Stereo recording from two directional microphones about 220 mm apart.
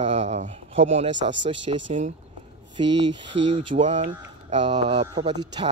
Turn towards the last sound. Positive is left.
turn(degrees=-20)  # may be behind; listen again after turning